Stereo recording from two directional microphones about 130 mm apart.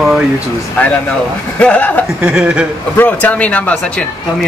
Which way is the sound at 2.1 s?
5° right (ahead or behind).